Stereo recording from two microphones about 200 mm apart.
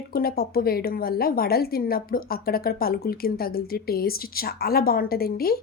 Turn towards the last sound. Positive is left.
turn(degrees=50)  # may be behind; listen again after turning